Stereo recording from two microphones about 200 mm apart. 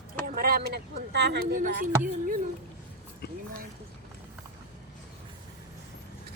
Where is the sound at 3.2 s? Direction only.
50° left (ahead or behind).